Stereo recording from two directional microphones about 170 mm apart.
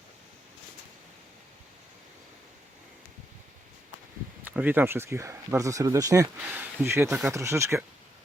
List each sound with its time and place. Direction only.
4.4 s speech: 10° right (ahead or behind)
6.3 s speech: 10° right (ahead or behind)